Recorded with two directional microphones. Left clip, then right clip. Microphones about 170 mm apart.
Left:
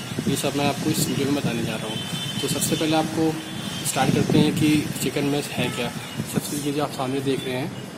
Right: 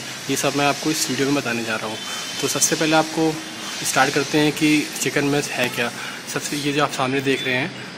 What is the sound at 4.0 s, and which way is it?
Speech, centre (ahead or behind).